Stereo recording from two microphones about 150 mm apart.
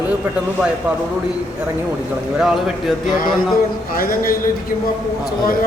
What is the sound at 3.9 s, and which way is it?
Speech, 75° left (ahead or behind).